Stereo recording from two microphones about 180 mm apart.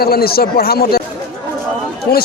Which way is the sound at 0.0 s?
60° left (ahead or behind).